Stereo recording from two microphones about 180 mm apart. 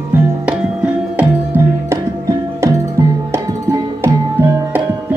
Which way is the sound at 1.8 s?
15° right (ahead or behind).